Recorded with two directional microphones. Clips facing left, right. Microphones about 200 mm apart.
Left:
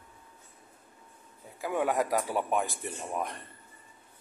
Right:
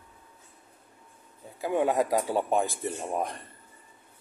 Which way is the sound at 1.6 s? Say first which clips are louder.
Right 3 dB; 25° right (ahead or behind).